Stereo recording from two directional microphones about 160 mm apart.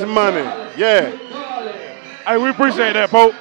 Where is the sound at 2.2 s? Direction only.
15° right (ahead or behind).